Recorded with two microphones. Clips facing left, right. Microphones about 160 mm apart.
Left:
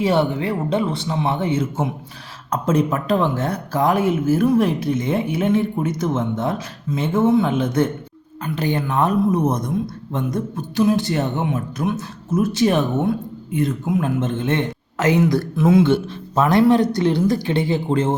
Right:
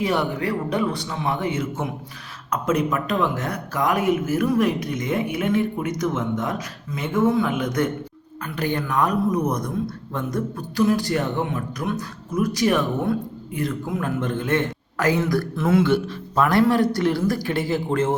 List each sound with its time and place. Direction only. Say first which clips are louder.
0.0 s speech: left 4 dB; 30° left (ahead or behind)
15.9 s speech: left 2 dB; 25° left (ahead or behind)